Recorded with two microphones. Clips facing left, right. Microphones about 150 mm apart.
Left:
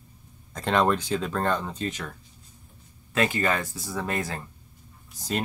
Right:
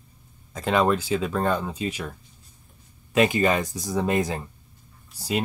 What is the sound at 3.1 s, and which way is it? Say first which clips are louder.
Speech: right 5 dB; 15° right (ahead or behind).